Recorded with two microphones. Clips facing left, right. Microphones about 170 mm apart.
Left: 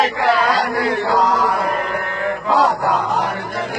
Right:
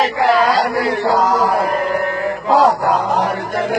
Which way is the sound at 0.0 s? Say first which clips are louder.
Right 2 dB; 40° right (ahead or behind).